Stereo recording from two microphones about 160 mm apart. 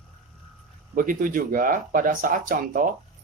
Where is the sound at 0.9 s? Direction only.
60° right (ahead or behind).